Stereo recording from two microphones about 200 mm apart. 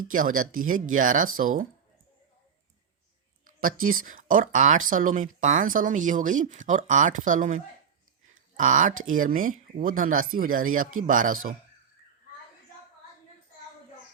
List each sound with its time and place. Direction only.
0.1 s speech: 45° right (ahead or behind)
3.6 s speech: 45° right (ahead or behind)